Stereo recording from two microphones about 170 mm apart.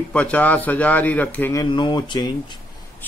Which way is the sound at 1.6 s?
30° left (ahead or behind).